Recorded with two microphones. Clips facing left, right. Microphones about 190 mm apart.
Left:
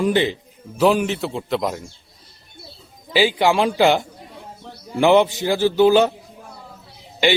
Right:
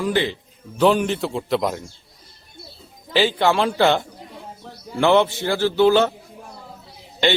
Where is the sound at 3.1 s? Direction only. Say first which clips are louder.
Left 1 dB; 10° left (ahead or behind).